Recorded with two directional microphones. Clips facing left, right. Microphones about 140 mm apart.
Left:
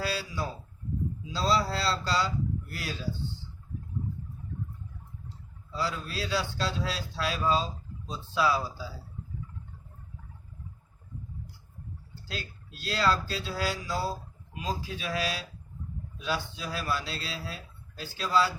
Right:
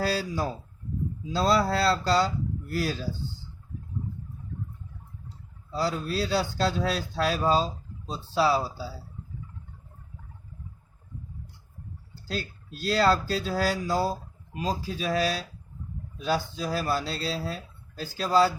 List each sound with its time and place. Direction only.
0.0 s speech: 45° right (ahead or behind)
5.7 s speech: 40° right (ahead or behind)
12.3 s speech: 40° right (ahead or behind)